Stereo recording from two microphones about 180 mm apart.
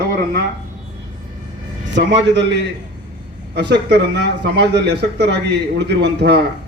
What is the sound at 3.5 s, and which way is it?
Speech, 70° right (ahead or behind).